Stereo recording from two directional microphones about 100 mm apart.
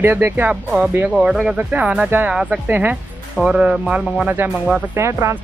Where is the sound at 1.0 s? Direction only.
5° right (ahead or behind).